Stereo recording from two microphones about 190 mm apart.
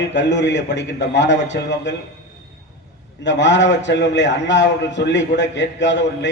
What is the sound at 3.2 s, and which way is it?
A man's voice, 70° left (ahead or behind).